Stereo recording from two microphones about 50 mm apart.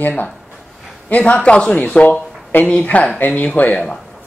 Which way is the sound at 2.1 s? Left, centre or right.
Left.